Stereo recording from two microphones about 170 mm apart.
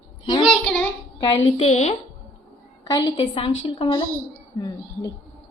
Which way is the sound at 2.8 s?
25° left (ahead or behind).